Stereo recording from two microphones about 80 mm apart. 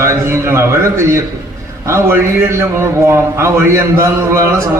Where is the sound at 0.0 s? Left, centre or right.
Right.